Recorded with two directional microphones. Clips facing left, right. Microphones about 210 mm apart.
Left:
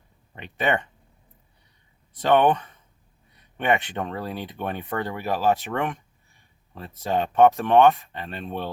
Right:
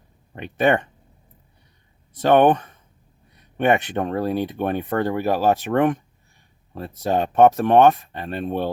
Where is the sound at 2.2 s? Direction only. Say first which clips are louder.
Right 4 dB; 45° right (ahead or behind).